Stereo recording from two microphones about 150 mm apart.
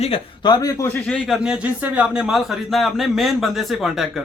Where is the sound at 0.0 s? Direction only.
40° left (ahead or behind).